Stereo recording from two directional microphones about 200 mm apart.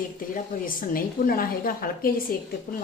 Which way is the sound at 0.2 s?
45° left (ahead or behind).